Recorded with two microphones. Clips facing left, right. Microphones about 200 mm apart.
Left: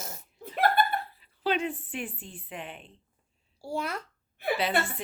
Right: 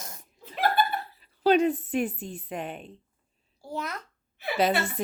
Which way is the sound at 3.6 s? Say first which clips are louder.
Left 2 dB; 10° left (ahead or behind).